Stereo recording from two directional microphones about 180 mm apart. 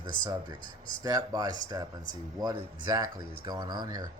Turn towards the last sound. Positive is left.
turn(degrees=-20)  # may be behind; listen again after turning